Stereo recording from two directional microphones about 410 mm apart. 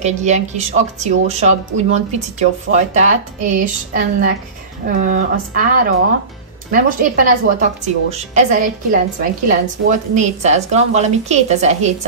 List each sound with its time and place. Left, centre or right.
0.0 s a woman's voice: centre